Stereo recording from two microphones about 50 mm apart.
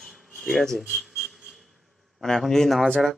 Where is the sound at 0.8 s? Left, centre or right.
Centre.